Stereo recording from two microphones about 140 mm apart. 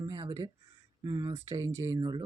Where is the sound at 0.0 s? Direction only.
25° right (ahead or behind).